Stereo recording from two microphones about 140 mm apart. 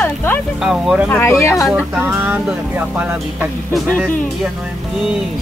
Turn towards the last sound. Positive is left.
turn(degrees=-15)  # may be behind; listen again after turning